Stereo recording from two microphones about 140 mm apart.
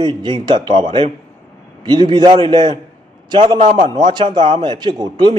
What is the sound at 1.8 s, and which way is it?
Speech, 30° right (ahead or behind).